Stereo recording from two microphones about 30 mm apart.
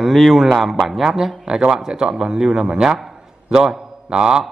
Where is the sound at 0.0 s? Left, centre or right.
Centre.